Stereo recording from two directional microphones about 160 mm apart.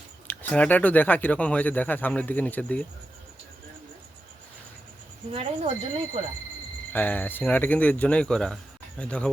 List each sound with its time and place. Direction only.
0.3 s speech: 10° left (ahead or behind)
5.3 s speech: 40° right (ahead or behind)
6.9 s speech: 10° left (ahead or behind)